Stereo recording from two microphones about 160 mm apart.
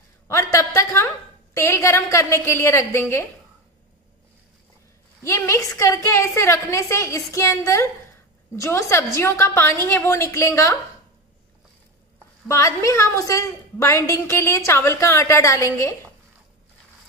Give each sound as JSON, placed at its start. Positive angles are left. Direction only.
{"t": 0.3, "sound": "a sound", "side_deg": 20}
{"t": 5.2, "sound": "a woman's voice", "side_deg": 15}
{"t": 12.4, "sound": "a woman's voice", "side_deg": 20}